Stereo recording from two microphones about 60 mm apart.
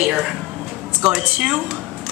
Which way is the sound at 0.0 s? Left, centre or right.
Centre.